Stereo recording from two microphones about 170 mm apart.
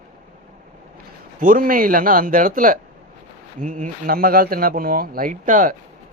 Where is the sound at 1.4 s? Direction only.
55° right (ahead or behind).